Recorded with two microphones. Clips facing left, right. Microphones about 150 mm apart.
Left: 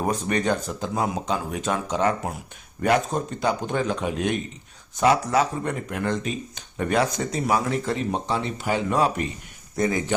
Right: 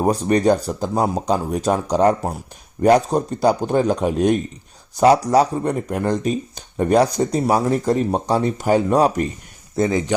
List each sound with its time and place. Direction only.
0.0 s speech: 35° right (ahead or behind)
9.7 s speech: 25° right (ahead or behind)